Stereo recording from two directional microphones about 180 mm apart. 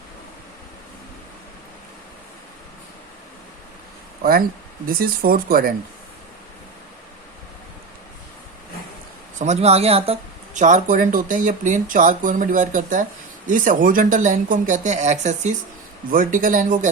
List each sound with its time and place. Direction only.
4.2 s speech: 55° right (ahead or behind)
9.4 s speech: 35° right (ahead or behind)